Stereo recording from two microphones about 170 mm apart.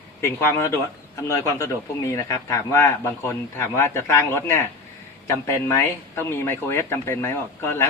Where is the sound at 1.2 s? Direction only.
15° left (ahead or behind).